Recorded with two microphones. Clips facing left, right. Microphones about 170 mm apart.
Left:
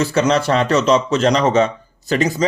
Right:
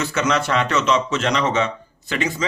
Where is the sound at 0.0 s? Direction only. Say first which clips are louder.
Left 5 dB; 35° left (ahead or behind).